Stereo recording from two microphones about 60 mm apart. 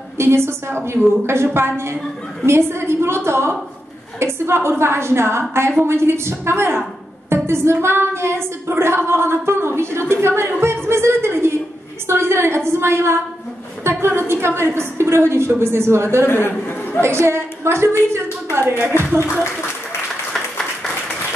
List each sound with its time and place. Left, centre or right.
0.2 s music: right
16.3 s a man's voice: left
17.0 s a woman's voice: right
20.3 s applause: centre